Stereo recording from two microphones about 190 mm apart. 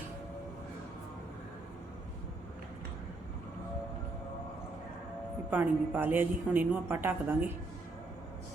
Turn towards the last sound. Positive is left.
turn(degrees=-10)  # may be behind; listen again after turning